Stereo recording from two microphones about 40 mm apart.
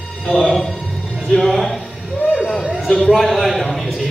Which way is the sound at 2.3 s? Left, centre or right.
Left.